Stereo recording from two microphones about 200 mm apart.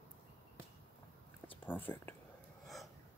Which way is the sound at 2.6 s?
Centre (ahead or behind).